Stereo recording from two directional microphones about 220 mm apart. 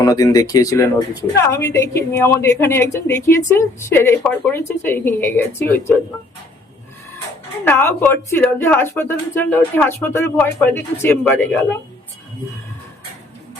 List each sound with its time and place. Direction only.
0.0 s a woman's voice: 15° left (ahead or behind)
7.6 s a woman's voice: 10° left (ahead or behind)